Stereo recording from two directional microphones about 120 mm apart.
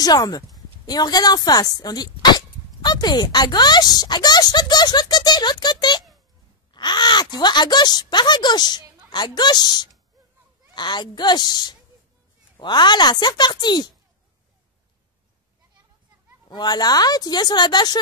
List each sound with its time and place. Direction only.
0.0 s a woman's voice: 30° left (ahead or behind)
16.4 s a woman's voice: 35° left (ahead or behind)